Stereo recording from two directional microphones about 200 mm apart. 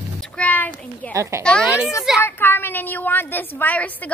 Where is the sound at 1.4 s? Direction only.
5° left (ahead or behind).